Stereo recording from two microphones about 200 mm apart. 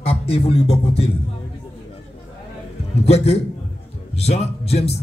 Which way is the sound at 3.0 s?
30° left (ahead or behind).